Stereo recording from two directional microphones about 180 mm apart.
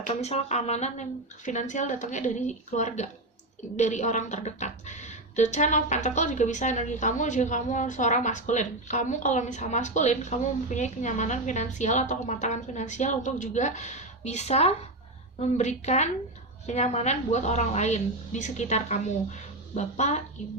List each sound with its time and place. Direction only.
0.1 s speech: 35° left (ahead or behind)